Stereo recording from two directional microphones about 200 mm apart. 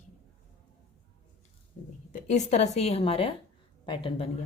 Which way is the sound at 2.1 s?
35° left (ahead or behind).